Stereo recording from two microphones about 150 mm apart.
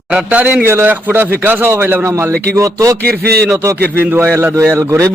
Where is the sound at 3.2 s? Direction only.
90° right.